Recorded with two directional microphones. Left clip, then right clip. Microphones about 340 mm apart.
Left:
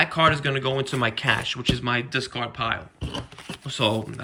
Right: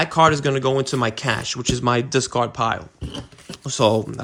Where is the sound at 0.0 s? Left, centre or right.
Centre.